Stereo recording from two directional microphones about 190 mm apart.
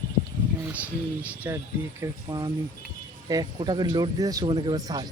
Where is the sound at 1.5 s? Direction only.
15° right (ahead or behind).